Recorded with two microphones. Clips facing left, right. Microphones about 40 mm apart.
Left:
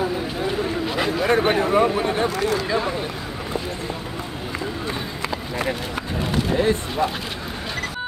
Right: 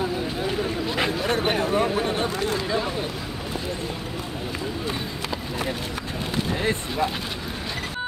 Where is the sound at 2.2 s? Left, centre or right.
Left.